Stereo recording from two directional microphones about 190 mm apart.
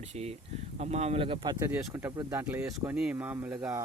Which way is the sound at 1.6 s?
15° right (ahead or behind).